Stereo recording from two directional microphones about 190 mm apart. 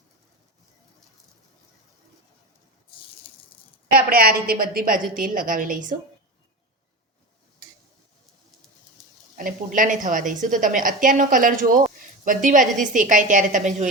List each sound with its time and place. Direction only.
3.9 s a woman's voice: 50° right (ahead or behind)
9.3 s a woman's voice: 45° right (ahead or behind)